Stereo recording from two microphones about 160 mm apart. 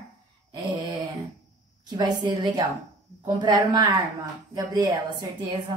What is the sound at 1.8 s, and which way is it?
A woman's voice, 25° right (ahead or behind).